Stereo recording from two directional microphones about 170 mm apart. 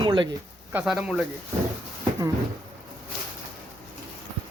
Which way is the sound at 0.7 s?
5° right (ahead or behind).